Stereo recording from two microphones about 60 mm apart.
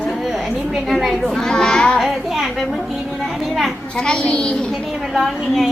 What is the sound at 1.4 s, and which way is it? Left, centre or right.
Children playing, centre.